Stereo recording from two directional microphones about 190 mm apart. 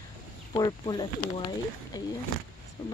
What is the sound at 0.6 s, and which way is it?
Speech, 20° left (ahead or behind).